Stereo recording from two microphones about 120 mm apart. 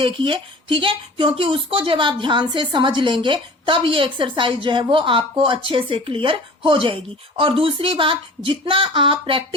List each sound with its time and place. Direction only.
0.0 s speech: 45° right (ahead or behind)